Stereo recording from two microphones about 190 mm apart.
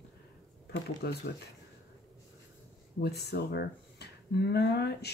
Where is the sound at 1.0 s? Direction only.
55° left (ahead or behind).